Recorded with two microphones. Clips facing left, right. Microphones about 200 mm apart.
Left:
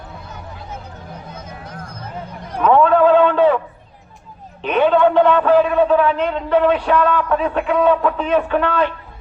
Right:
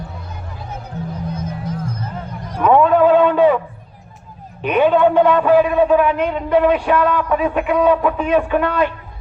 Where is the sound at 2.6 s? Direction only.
10° right (ahead or behind).